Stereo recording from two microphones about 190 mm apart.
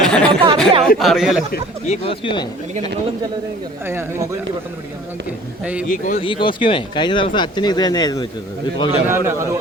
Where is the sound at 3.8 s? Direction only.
10° right (ahead or behind).